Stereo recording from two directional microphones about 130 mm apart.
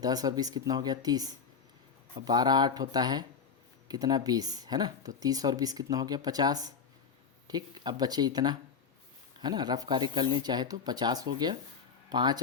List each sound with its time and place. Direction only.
0.0 s speech: 30° right (ahead or behind)